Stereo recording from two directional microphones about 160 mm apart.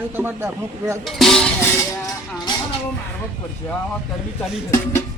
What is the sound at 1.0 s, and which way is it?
Speech, centre (ahead or behind).